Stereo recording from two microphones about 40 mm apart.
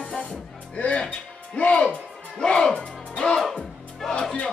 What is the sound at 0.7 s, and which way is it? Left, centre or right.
Speech, left.